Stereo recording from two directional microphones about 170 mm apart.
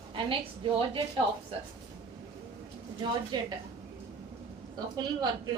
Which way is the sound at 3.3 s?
25° right (ahead or behind).